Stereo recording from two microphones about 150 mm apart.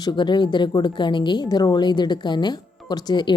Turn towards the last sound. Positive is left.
turn(degrees=30)  # may be behind; listen again after turning